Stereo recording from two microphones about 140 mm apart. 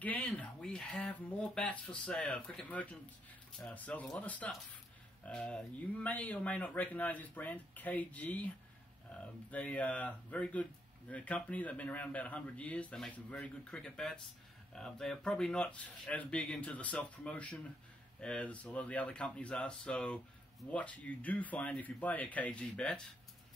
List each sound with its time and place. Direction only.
0.0 s speech: 10° left (ahead or behind)